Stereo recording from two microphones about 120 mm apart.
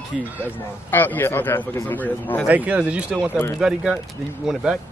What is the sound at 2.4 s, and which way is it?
Speech, 10° right (ahead or behind).